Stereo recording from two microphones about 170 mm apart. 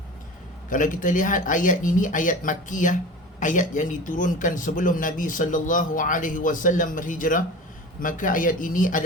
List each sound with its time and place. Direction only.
0.7 s speech: 50° left (ahead or behind)